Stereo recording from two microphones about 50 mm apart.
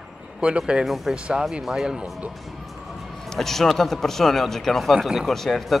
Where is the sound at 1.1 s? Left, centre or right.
Centre.